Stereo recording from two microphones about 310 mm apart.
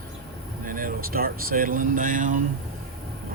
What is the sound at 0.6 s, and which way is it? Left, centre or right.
Speech, right.